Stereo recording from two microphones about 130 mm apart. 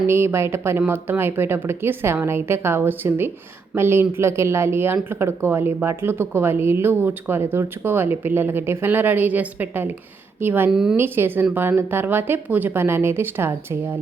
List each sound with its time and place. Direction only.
0.1 s speech: 20° right (ahead or behind)
10.7 s speech: 5° right (ahead or behind)
10.9 s speech: 15° right (ahead or behind)